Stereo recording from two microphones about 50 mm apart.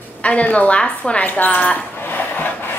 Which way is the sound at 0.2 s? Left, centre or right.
Left.